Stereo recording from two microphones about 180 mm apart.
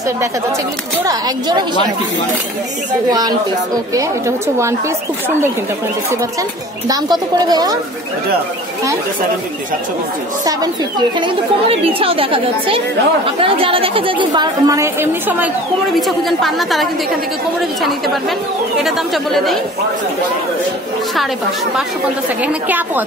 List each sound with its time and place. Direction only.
1.0 s speech: 20° right (ahead or behind)
3.1 s speech: 20° right (ahead or behind)
4.6 s a woman's voice: 15° right (ahead or behind)
6.9 s speech: 20° right (ahead or behind)
10.4 s speech: 20° right (ahead or behind)
16.0 s a woman's voice: centre (ahead or behind)
18.8 s a woman's voice: centre (ahead or behind)
22.4 s a woman's voice: 10° right (ahead or behind)